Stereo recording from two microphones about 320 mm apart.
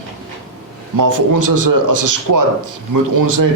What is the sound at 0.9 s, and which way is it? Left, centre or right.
A man's voice, right.